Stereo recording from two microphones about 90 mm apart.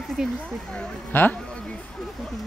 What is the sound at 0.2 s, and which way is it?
Speech, 10° right (ahead or behind).